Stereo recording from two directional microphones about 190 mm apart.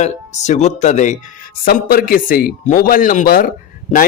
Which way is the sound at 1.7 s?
50° left (ahead or behind).